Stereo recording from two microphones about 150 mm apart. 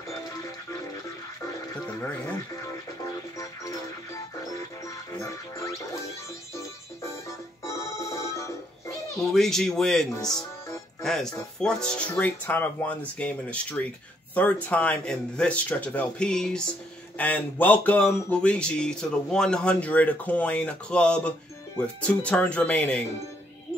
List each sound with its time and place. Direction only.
5.1 s music: 20° left (ahead or behind)
7.0 s music: 20° left (ahead or behind)
9.1 s speech: centre (ahead or behind)